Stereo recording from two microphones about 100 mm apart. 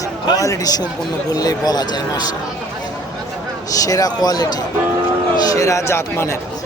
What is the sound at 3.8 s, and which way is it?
Speech, 35° left (ahead or behind).